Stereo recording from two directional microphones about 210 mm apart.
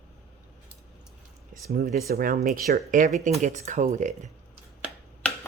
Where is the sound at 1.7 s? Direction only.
45° right (ahead or behind).